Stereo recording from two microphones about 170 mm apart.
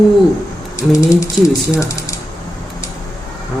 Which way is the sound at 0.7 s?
20° left (ahead or behind).